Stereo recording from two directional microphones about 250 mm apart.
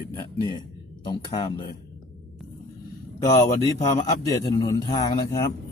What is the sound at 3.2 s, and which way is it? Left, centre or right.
Speech, centre.